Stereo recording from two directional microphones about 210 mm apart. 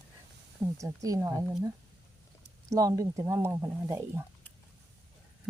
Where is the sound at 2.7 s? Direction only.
15° right (ahead or behind).